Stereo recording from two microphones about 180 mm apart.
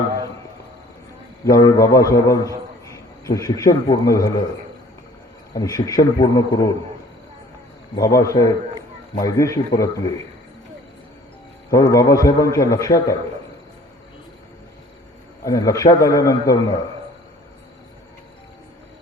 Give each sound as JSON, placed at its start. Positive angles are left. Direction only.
{"t": 1.5, "sound": "a man's voice", "side_deg": 20}
{"t": 5.5, "sound": "a man's voice", "side_deg": 20}
{"t": 7.9, "sound": "a man's voice", "side_deg": 20}
{"t": 11.7, "sound": "a man's voice", "side_deg": 20}
{"t": 15.4, "sound": "a man's voice", "side_deg": 20}